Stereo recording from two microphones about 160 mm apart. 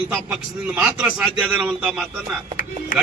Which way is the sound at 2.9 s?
60° left (ahead or behind).